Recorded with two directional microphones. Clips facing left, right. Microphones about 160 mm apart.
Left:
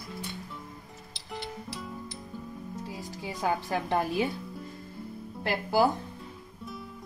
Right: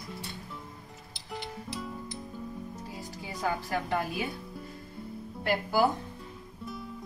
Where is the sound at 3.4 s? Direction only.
20° left (ahead or behind).